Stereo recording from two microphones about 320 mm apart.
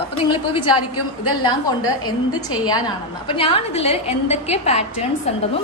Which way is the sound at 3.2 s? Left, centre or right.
Centre.